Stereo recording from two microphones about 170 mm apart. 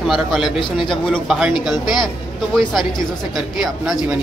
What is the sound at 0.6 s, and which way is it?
Speech, 30° left (ahead or behind).